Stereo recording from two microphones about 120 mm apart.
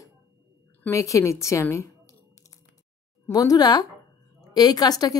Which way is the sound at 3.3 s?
30° left (ahead or behind).